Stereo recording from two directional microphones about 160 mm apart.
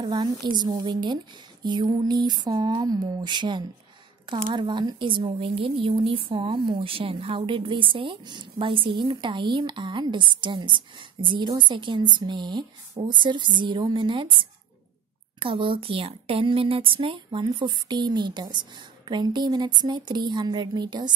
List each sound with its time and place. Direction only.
0.0 s a woman's voice: 25° right (ahead or behind)